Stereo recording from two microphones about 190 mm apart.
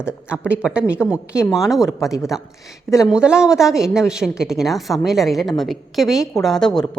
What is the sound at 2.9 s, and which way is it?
Speech, centre (ahead or behind).